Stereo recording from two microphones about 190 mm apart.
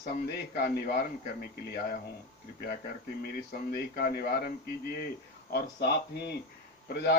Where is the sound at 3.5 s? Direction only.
55° left (ahead or behind).